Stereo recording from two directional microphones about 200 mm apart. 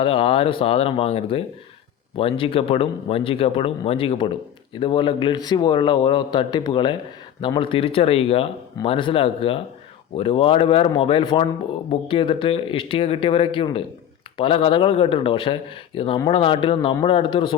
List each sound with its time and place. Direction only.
0.0 s speech: 25° left (ahead or behind)